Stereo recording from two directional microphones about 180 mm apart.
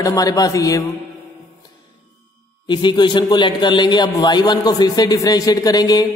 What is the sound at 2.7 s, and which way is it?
A man's voice, 25° left (ahead or behind).